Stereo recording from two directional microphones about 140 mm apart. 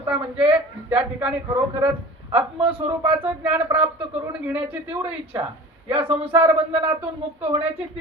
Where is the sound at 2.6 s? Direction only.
40° right (ahead or behind).